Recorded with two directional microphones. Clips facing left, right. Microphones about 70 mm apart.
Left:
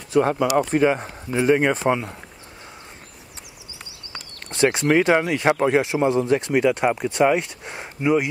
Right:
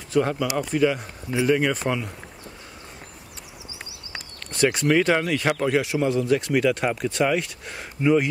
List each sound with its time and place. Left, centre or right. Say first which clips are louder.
0.1 s a man's voice: left 3 dB; left
0.7 s speech: left 3 dB; left
4.5 s a man's voice: left 2 dB; left